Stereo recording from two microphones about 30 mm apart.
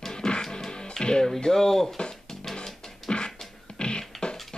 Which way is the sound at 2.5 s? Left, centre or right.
Left.